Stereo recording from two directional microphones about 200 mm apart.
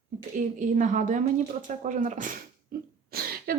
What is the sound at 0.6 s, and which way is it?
A woman's voice, 40° right (ahead or behind).